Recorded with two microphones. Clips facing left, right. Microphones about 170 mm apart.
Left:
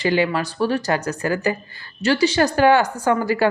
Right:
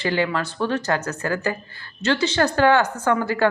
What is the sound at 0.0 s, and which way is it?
Speech, 15° left (ahead or behind).